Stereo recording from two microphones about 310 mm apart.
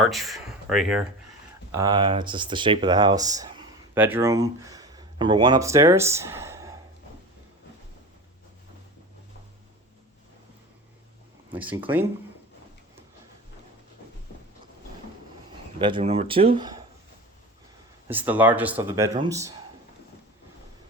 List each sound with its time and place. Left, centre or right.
0.0 s speech: centre
1.7 s speech: centre
11.5 s speech: centre
15.8 s speech: centre
18.1 s speech: centre